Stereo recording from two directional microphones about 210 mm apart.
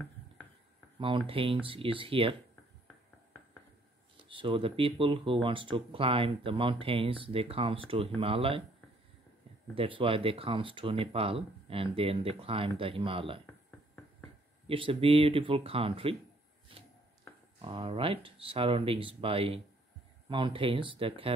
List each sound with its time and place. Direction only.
0.9 s speech: 25° right (ahead or behind)
4.3 s speech: 25° right (ahead or behind)
9.8 s speech: 25° right (ahead or behind)
14.7 s speech: 25° right (ahead or behind)
16.7 s chopping: 25° right (ahead or behind)
17.6 s speech: 25° right (ahead or behind)